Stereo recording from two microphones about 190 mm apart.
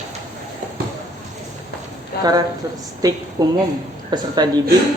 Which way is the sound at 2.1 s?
55° left (ahead or behind).